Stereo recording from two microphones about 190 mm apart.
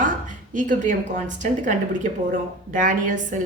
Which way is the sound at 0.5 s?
40° right (ahead or behind).